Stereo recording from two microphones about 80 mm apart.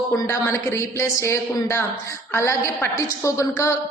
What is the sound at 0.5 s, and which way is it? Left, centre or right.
A woman's voice, left.